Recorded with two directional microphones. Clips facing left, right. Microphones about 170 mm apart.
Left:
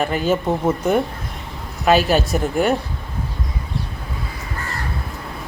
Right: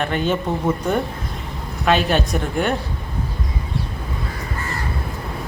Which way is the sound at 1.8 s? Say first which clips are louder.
Left 2 dB; 5° left (ahead or behind).